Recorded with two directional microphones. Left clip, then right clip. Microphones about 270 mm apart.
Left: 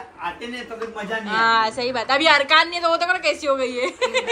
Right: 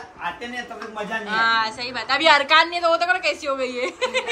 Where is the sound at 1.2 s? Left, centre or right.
Centre.